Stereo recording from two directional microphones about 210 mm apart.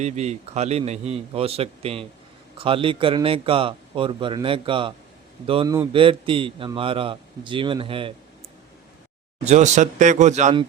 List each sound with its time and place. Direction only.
0.0 s a man's voice: 30° right (ahead or behind)
9.4 s speech: 35° right (ahead or behind)